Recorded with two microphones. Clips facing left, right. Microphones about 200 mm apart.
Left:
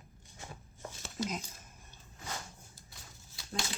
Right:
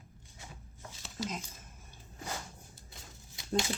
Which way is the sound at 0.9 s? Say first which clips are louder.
Left 2 dB; 50° left (ahead or behind).